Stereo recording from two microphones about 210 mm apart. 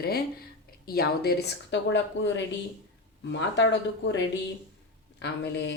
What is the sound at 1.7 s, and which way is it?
A woman's voice, 60° left (ahead or behind).